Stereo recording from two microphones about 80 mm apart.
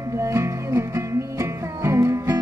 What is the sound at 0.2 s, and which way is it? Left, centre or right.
Music, right.